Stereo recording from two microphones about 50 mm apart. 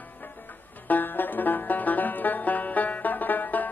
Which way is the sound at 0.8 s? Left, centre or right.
Left.